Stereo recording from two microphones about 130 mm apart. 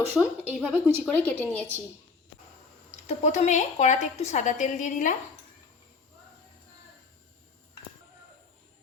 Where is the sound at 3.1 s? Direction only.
60° left (ahead or behind); by 5.1 s 75° left (ahead or behind).